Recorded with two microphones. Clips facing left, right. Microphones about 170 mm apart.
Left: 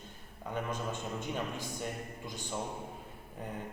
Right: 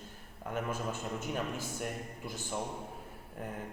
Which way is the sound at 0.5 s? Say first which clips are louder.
Right 1 dB; 5° right (ahead or behind).